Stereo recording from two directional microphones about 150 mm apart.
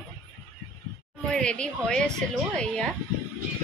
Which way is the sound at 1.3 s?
5° left (ahead or behind).